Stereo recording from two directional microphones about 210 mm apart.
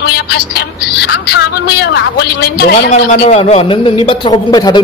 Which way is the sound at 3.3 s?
25° left (ahead or behind).